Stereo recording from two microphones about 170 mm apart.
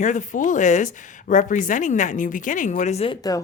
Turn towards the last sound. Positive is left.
turn(degrees=40)  # may be behind; listen again after turning